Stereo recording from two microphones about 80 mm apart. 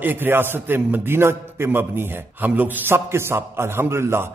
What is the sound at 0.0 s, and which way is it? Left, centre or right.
A man's voice, right.